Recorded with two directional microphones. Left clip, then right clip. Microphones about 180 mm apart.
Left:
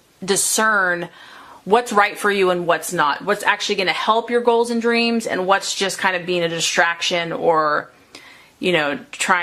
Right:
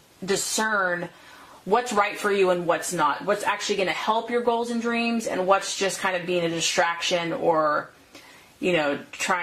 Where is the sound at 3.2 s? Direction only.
30° left (ahead or behind).